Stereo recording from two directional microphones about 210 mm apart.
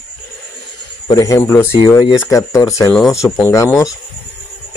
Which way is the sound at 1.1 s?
15° left (ahead or behind).